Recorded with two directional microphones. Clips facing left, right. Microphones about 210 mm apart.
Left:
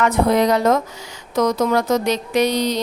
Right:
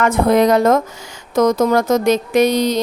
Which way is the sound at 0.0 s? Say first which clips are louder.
Right 3 dB; 50° right (ahead or behind).